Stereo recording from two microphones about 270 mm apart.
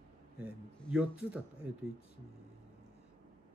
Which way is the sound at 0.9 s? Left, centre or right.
Centre.